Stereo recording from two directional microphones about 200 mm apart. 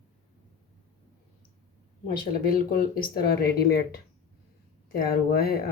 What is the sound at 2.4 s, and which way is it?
Speech, 50° left (ahead or behind).